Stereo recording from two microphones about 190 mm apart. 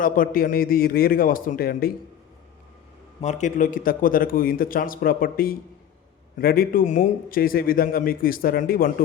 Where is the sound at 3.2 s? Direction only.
40° left (ahead or behind).